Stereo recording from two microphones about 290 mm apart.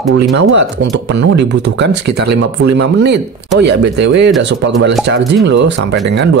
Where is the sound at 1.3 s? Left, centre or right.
Right.